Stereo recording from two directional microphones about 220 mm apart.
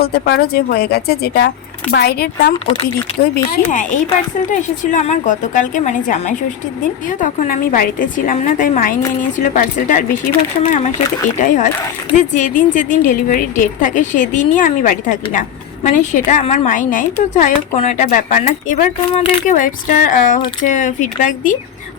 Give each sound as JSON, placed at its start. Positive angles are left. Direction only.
{"t": 0.0, "sound": "a woman's voice", "side_deg": 50}
{"t": 19.5, "sound": "a woman's voice", "side_deg": 35}